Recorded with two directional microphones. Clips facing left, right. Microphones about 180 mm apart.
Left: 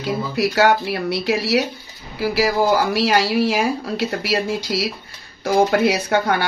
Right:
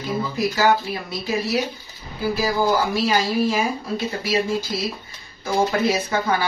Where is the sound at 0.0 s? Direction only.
75° left (ahead or behind).